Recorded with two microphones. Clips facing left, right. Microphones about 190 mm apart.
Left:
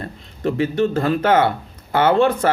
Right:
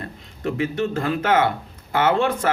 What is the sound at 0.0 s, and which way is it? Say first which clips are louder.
Speech: left 4 dB; 35° left (ahead or behind).